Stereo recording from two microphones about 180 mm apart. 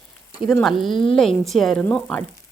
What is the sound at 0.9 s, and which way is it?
Speech, 30° left (ahead or behind).